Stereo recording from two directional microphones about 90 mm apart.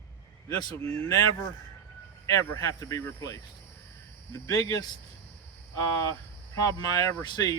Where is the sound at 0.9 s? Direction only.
35° left (ahead or behind).